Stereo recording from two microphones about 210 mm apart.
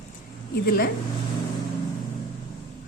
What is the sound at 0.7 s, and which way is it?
Speech, 45° left (ahead or behind).